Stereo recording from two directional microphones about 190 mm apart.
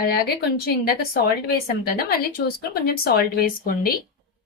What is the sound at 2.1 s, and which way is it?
Speech, 55° left (ahead or behind).